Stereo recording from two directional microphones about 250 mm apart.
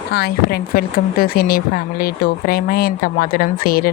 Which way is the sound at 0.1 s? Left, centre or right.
Left.